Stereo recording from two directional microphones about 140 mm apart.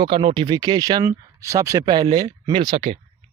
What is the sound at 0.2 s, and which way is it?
Speech, 35° right (ahead or behind).